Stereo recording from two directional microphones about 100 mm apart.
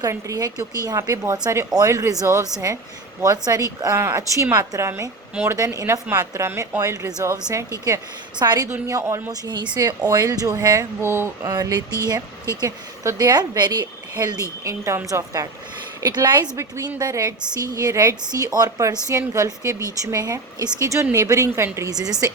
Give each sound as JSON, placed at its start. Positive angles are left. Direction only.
{"t": 0.0, "sound": "speech", "side_deg": -35}
{"t": 9.7, "sound": "speech", "side_deg": -40}
{"t": 11.4, "sound": "speech", "side_deg": -40}
{"t": 14.6, "sound": "speech", "side_deg": -30}
{"t": 16.0, "sound": "speech", "side_deg": -40}
{"t": 16.6, "sound": "speech", "side_deg": -30}
{"t": 21.8, "sound": "speech", "side_deg": -40}